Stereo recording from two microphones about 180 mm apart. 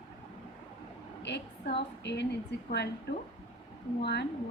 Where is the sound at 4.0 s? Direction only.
65° left (ahead or behind).